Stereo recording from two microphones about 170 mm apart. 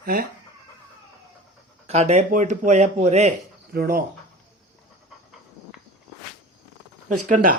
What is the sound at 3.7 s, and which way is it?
Speech, 60° right (ahead or behind).